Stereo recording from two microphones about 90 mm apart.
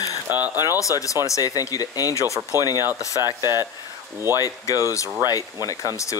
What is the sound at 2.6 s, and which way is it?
Speech, 45° left (ahead or behind).